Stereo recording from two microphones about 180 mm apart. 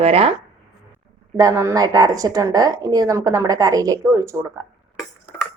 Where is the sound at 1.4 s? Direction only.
20° right (ahead or behind).